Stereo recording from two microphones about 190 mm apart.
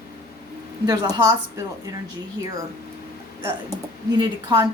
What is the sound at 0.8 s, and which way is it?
Speech, 20° right (ahead or behind).